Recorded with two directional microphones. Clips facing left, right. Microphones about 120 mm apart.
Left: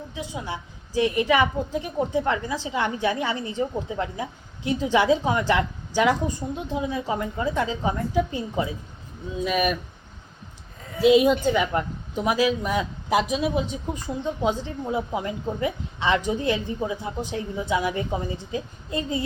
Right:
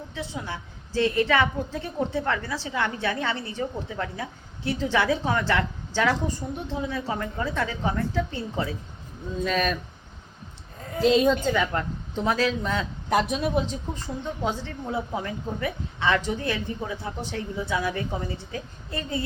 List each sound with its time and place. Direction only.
0.1 s a woman's voice: 15° left (ahead or behind)
11.0 s a woman's voice: 10° left (ahead or behind)
13.9 s a woman's voice: 15° left (ahead or behind)